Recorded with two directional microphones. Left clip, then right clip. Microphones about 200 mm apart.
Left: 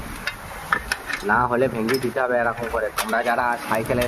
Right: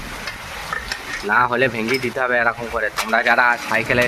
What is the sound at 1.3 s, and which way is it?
Speech, 15° right (ahead or behind).